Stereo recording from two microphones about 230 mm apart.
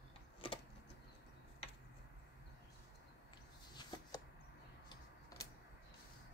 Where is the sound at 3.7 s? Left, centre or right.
Centre.